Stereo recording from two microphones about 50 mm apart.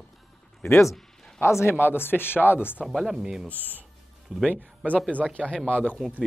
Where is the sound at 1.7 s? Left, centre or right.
Left.